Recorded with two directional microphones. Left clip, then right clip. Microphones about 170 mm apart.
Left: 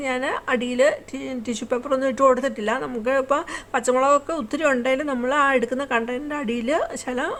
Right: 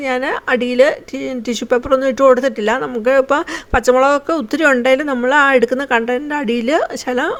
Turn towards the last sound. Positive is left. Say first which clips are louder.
# right 8 dB
turn(degrees=-30)  # may be behind; listen again after turning